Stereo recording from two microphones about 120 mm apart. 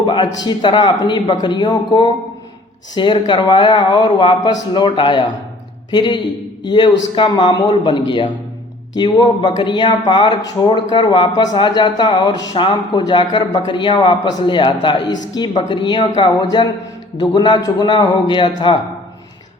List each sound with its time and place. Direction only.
0.0 s speech: 40° left (ahead or behind)